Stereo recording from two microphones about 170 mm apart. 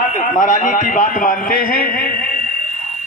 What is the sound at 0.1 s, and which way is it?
A man's voice, 50° left (ahead or behind).